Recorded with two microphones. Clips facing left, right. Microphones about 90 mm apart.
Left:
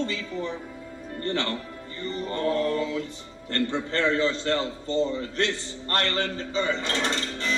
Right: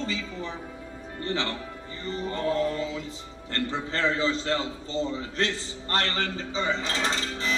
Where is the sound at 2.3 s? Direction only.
20° right (ahead or behind).